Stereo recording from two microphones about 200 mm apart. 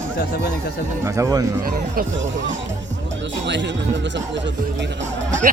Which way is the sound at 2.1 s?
70° right (ahead or behind).